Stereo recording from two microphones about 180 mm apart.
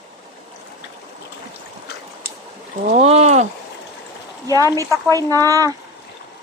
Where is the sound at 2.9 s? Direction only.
35° right (ahead or behind).